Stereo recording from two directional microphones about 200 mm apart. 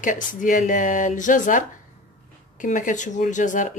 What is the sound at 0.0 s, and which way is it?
Speech, 40° left (ahead or behind).